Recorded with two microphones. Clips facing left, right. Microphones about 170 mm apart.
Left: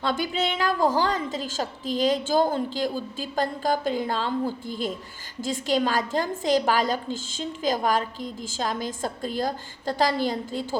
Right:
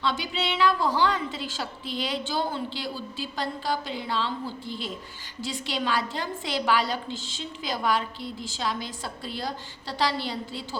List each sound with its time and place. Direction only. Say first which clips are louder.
0.0 s a woman's voice: left 3 dB; 45° left (ahead or behind)